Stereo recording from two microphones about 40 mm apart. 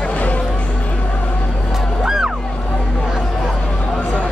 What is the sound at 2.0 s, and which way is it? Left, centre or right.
Music, centre.